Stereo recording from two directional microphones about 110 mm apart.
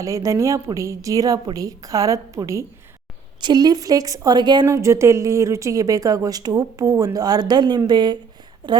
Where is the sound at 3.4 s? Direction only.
40° right (ahead or behind).